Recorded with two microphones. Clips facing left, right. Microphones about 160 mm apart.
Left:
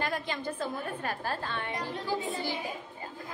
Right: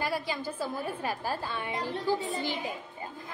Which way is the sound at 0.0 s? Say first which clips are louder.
Right 1 dB; 10° right (ahead or behind).